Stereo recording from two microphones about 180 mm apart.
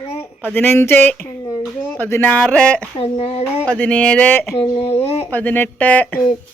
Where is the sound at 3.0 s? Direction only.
35° left (ahead or behind).